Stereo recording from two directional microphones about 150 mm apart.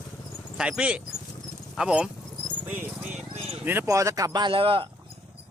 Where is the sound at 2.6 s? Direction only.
10° right (ahead or behind).